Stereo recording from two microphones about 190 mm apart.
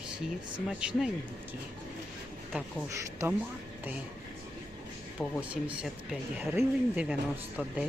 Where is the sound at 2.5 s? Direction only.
15° right (ahead or behind).